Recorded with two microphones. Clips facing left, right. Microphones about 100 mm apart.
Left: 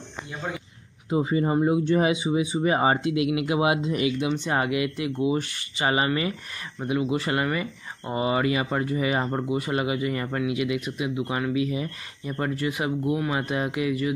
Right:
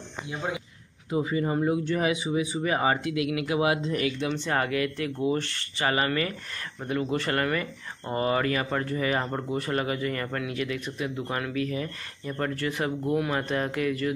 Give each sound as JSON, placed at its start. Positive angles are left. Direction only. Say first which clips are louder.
{"t": 0.3, "sound": "speech", "louder": "right 1 dB", "side_deg": -5}
{"t": 1.1, "sound": "speech", "louder": "left 3 dB", "side_deg": 25}